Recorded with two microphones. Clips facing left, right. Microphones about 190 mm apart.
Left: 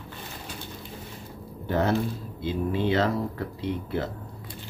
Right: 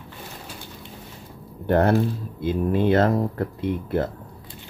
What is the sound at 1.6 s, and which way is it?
Speech, 60° right (ahead or behind).